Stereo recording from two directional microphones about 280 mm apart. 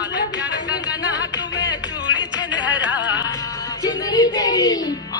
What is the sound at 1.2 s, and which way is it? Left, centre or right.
Music, left.